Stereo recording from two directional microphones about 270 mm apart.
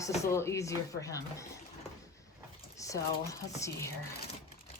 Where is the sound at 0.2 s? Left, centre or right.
Centre.